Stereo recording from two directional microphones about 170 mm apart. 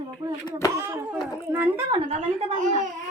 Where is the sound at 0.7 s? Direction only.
15° right (ahead or behind).